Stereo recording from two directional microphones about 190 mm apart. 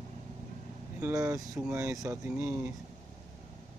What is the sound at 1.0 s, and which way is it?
Speech, 15° right (ahead or behind).